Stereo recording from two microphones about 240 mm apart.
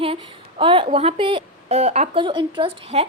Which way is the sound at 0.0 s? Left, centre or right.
Right.